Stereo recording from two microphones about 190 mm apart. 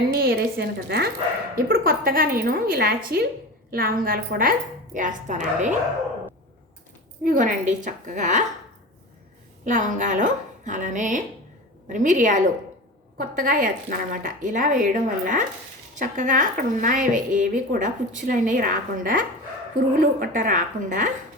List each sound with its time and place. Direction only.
0.1 s a woman's voice: 55° right (ahead or behind)
7.3 s a woman's voice: 45° right (ahead or behind)
9.6 s a woman's voice: 40° right (ahead or behind)